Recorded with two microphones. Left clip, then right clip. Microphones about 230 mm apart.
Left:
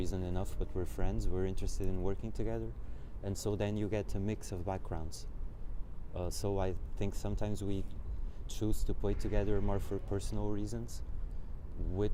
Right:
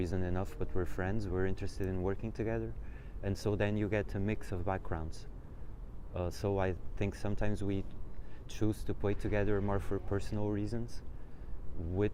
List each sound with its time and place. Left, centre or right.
0.0 s speech: centre
6.1 s speech: centre